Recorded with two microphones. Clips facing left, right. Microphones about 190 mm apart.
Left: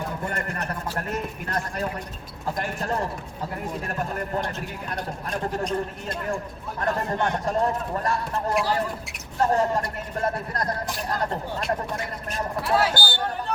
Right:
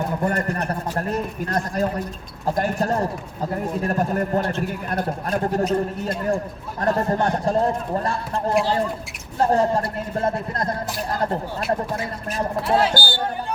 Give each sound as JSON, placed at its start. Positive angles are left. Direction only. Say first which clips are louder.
{"t": 0.2, "sound": "a man's voice", "louder": "right 7 dB", "side_deg": -40}
{"t": 11.6, "sound": "speech", "louder": "right 5 dB", "side_deg": 0}
{"t": 12.4, "sound": "speech", "louder": "right 3 dB", "side_deg": -25}